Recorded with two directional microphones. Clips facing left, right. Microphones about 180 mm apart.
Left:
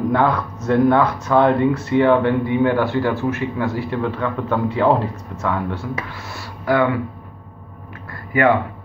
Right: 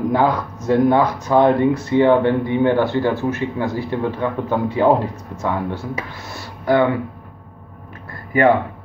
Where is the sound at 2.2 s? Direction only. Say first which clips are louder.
Even; 25° right (ahead or behind).